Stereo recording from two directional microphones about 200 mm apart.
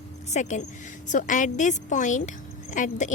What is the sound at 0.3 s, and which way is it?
A woman's voice, 35° left (ahead or behind).